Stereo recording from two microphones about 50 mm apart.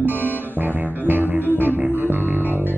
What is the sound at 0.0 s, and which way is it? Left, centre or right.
Music, right.